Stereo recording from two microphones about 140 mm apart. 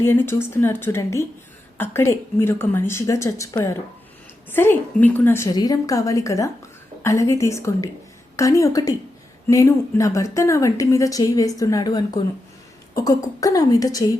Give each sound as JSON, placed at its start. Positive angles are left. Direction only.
{"t": 0.0, "sound": "a woman's voice", "side_deg": 15}
{"t": 5.5, "sound": "a woman's voice", "side_deg": 25}